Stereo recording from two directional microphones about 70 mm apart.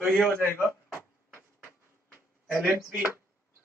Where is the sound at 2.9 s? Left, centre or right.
Right.